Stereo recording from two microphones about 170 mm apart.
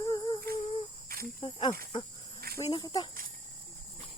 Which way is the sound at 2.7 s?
25° left (ahead or behind).